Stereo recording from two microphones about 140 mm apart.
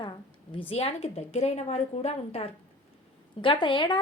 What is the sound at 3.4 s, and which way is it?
Speech, 35° left (ahead or behind).